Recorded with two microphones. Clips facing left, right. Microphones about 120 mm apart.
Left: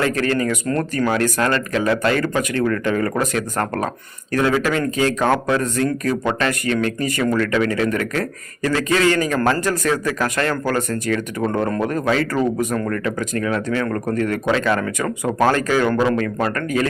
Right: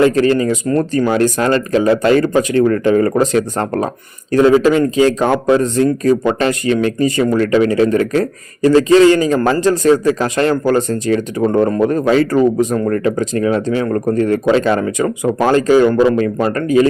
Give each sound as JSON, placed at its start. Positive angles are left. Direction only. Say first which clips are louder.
{"t": 0.0, "sound": "a man's voice", "louder": "right 8 dB", "side_deg": -25}